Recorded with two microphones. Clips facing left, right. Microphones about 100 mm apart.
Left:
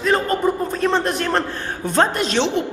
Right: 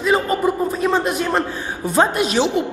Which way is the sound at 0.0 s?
5° right (ahead or behind).